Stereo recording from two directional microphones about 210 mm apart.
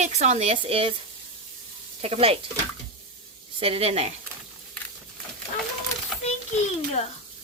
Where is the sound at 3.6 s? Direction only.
30° right (ahead or behind).